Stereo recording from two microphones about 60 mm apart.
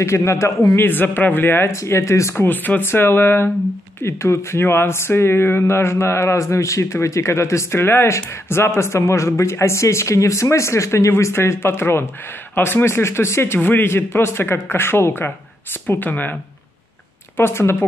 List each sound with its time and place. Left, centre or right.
0.0 s speech: left
0.7 s a man's voice: left
1.7 s speech: left
2.3 s a man's voice: left
4.0 s a man's voice: left
17.4 s a man's voice: left